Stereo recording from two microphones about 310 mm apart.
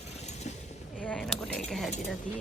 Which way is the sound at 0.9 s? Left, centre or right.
Centre.